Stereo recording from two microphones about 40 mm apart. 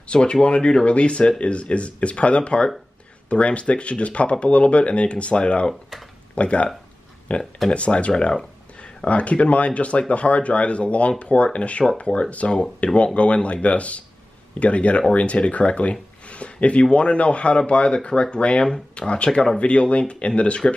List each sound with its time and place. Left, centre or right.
0.1 s speech: left